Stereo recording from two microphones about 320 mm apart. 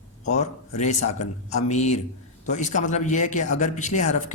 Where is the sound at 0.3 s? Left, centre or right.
Left.